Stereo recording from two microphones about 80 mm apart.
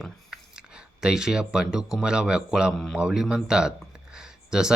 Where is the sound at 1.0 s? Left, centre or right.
Centre.